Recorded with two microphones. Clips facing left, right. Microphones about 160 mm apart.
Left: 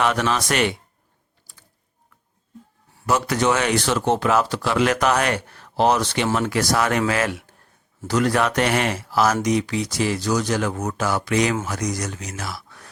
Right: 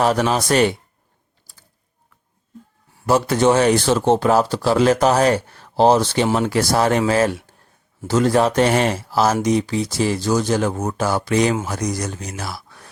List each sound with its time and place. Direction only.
0.0 s speech: 35° right (ahead or behind)
1.5 s mechanisms: 35° right (ahead or behind)
3.1 s speech: 30° right (ahead or behind)